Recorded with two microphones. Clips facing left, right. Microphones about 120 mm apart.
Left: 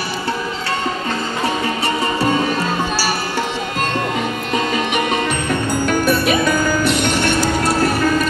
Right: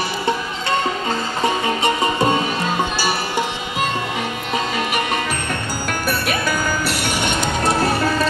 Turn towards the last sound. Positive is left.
turn(degrees=-20)  # may be behind; listen again after turning